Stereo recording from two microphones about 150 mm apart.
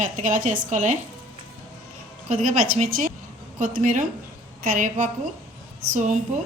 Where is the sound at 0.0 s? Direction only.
60° right (ahead or behind).